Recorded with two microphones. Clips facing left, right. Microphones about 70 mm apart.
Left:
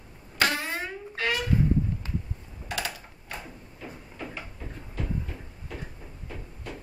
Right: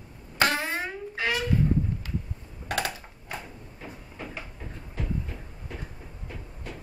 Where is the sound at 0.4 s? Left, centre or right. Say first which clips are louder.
Right 2 dB; right.